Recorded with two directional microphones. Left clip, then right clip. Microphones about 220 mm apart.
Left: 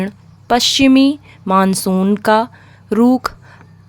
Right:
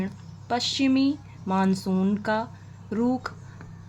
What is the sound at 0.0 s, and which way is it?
A woman's voice, 55° left (ahead or behind).